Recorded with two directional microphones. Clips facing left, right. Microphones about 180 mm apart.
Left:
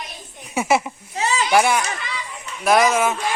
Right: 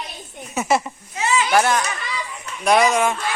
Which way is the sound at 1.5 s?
10° left (ahead or behind).